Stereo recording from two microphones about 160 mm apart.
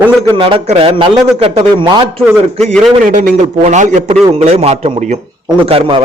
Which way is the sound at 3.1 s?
60° right (ahead or behind).